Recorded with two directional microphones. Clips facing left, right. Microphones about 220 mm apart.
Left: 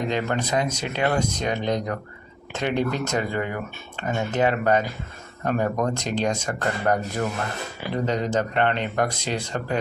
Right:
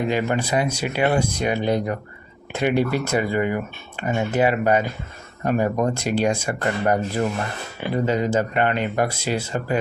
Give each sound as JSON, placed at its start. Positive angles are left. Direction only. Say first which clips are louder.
{"t": 0.0, "sound": "speech", "louder": "right 3 dB", "side_deg": -10}